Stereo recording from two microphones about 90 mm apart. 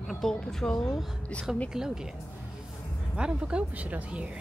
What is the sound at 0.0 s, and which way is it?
Speech, 5° left (ahead or behind).